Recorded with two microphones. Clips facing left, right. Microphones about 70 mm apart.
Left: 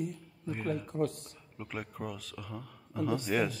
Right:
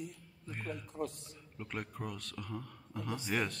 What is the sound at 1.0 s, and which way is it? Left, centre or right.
Speech, left.